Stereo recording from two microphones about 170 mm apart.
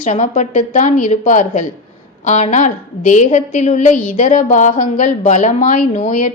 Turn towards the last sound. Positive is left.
turn(degrees=50)  # may be behind; listen again after turning